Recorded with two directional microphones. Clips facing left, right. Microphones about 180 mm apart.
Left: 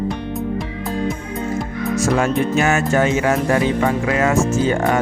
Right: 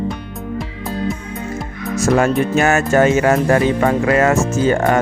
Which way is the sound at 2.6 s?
45° right (ahead or behind).